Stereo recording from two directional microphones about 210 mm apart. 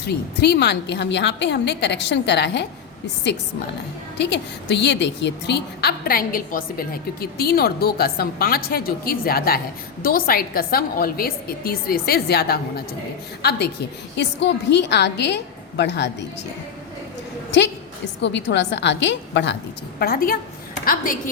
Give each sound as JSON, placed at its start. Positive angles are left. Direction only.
{"t": 0.0, "sound": "a woman's voice", "side_deg": 50}
{"t": 4.2, "sound": "a woman's voice", "side_deg": 55}
{"t": 18.2, "sound": "a woman's voice", "side_deg": 55}
{"t": 20.0, "sound": "a woman's voice", "side_deg": 45}